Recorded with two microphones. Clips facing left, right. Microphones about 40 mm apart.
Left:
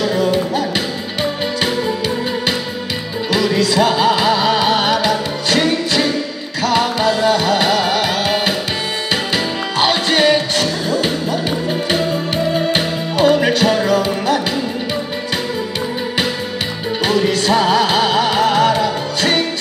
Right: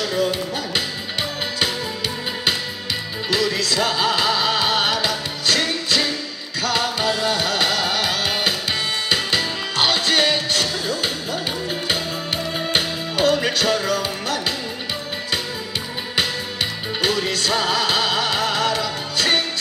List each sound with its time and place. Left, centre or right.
0.2 s music: centre
3.3 s music: centre
12.5 s music: centre
17.0 s music: centre